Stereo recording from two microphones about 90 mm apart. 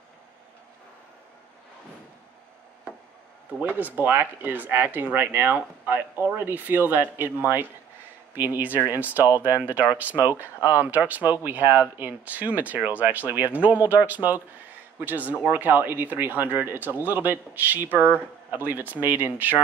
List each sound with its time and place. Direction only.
3.6 s speech: 20° right (ahead or behind)